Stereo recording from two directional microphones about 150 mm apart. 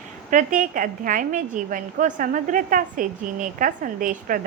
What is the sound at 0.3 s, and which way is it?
A woman's voice, 60° right (ahead or behind).